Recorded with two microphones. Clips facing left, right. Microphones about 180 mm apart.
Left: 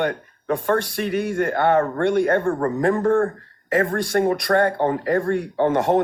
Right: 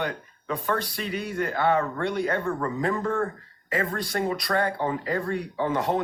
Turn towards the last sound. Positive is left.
turn(degrees=50)  # may be behind; listen again after turning